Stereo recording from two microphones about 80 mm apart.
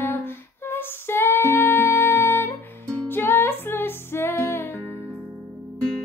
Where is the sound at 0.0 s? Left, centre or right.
Left.